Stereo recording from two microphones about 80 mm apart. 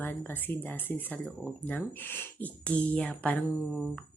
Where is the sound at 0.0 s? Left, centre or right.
Left.